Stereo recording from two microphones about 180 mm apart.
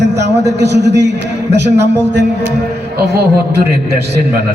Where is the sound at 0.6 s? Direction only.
70° right (ahead or behind).